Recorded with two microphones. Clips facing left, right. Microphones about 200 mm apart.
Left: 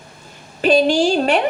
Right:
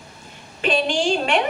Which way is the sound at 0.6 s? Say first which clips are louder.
Left 7 dB; 40° left (ahead or behind).